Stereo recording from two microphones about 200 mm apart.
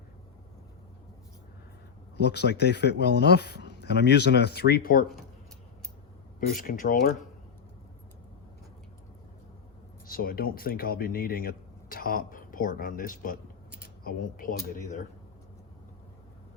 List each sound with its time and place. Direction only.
2.2 s speech: 55° left (ahead or behind)
6.5 s speech: 45° left (ahead or behind)
10.1 s speech: 45° left (ahead or behind)